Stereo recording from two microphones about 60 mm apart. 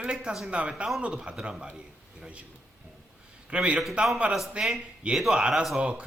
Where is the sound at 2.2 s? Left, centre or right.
Centre.